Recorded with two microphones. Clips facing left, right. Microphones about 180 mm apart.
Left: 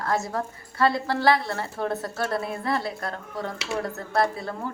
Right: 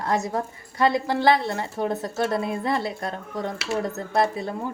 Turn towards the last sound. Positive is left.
turn(degrees=-20)  # may be behind; listen again after turning